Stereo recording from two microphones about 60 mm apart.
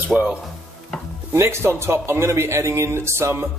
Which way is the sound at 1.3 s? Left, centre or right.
Right.